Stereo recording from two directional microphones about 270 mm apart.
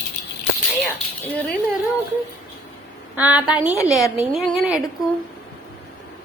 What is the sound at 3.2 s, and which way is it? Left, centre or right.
Speech, centre.